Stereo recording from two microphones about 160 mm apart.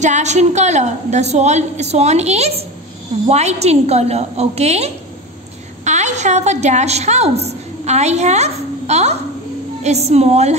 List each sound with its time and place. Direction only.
0.0 s a woman's voice: 45° right (ahead or behind)